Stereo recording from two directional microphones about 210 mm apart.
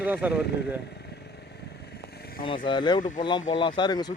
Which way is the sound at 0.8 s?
50° left (ahead or behind).